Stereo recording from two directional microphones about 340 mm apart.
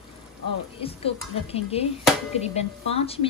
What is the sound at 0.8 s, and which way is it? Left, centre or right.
Speech, centre.